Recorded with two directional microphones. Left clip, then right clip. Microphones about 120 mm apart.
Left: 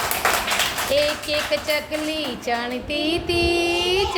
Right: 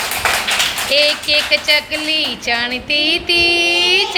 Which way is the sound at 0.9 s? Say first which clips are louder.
Right 9 dB; 15° left (ahead or behind).